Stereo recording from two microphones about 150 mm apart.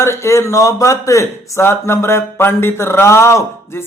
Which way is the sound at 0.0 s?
20° left (ahead or behind).